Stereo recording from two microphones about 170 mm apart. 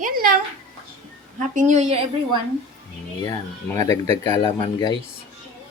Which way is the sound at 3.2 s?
20° left (ahead or behind).